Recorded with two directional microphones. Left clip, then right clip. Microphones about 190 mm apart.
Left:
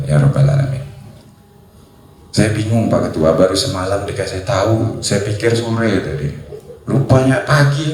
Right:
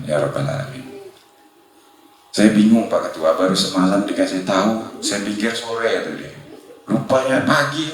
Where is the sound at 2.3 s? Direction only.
30° left (ahead or behind).